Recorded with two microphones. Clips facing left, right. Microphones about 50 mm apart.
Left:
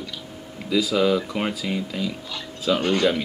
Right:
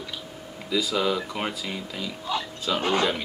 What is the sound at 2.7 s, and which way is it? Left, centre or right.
Speech, centre.